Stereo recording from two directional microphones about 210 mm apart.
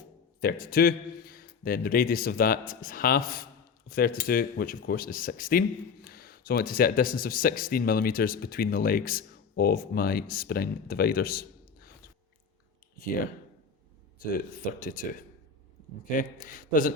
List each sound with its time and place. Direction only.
0.6 s speech: 45° left (ahead or behind)
14.2 s a man's voice: 40° left (ahead or behind)
16.0 s a man's voice: 40° left (ahead or behind)